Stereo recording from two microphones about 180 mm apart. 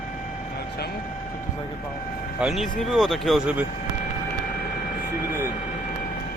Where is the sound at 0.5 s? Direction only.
60° left (ahead or behind).